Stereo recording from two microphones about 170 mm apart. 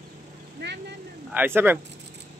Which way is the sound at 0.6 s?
80° right.